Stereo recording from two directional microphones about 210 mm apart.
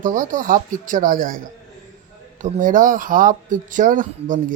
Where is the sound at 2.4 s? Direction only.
35° right (ahead or behind).